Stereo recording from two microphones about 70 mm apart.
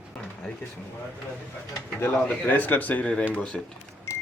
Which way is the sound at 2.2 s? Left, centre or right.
Left.